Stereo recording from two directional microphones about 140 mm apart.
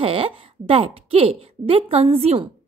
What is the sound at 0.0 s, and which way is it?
A woman's voice, 45° right (ahead or behind).